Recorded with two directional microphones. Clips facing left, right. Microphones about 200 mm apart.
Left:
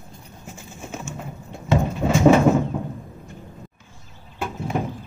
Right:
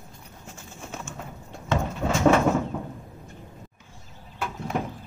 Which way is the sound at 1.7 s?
10° left (ahead or behind).